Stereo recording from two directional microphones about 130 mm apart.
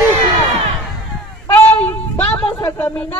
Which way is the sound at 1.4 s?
15° left (ahead or behind).